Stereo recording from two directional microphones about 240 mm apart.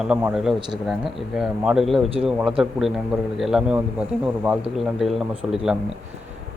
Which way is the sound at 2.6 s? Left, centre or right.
Centre.